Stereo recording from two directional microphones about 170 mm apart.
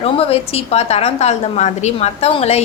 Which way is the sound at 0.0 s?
35° left (ahead or behind).